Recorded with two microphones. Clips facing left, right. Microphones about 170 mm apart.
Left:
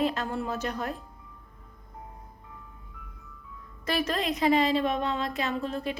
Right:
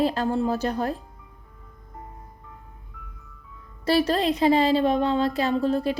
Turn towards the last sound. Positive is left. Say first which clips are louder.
# right 8 dB
turn(degrees=-35)  # may be behind; listen again after turning